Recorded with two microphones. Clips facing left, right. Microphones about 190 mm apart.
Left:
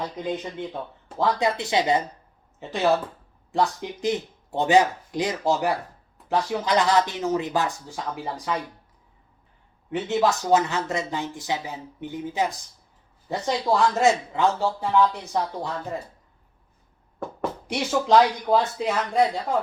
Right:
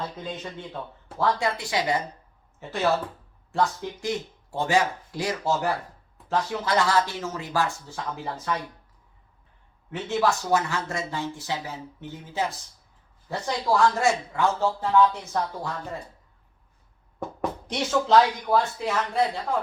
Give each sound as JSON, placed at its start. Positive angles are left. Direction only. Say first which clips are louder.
{"t": 0.0, "sound": "speech", "louder": "left 5 dB", "side_deg": 15}
{"t": 9.9, "sound": "speech", "louder": "left 2 dB", "side_deg": 20}
{"t": 17.7, "sound": "speech", "louder": "left 1 dB", "side_deg": 10}